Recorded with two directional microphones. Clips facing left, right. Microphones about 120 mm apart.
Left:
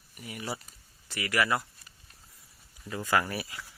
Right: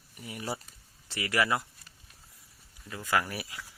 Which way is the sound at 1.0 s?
30° right (ahead or behind).